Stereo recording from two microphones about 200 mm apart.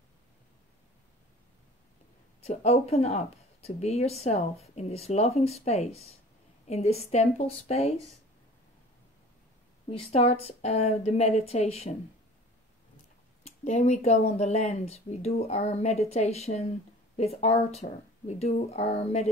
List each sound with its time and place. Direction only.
2.4 s speech: 30° left (ahead or behind)
9.8 s speech: 30° left (ahead or behind)
13.7 s speech: 35° left (ahead or behind)